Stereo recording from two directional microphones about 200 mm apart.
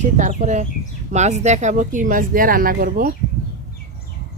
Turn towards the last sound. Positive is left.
turn(degrees=-45)  # may be behind; listen again after turning